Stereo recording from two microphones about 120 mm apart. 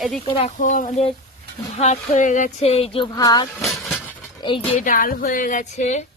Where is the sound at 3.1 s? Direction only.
35° left (ahead or behind).